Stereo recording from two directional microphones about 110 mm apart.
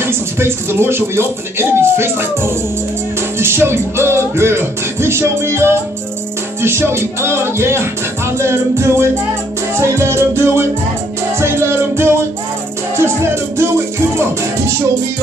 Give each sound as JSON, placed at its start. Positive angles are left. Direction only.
{"t": 0.0, "sound": "music", "side_deg": -20}